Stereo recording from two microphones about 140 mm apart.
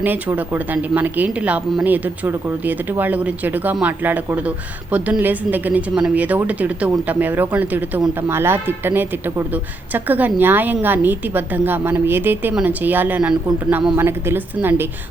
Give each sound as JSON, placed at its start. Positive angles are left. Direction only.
{"t": 0.0, "sound": "speech", "side_deg": -15}